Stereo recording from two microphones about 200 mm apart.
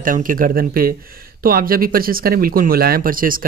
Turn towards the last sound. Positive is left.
turn(degrees=-45)  # may be behind; listen again after turning